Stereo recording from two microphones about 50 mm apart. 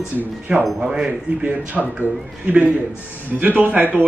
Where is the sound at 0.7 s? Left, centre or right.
Centre.